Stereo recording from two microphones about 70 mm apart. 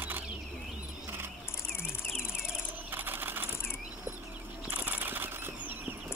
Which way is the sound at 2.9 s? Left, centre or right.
Right.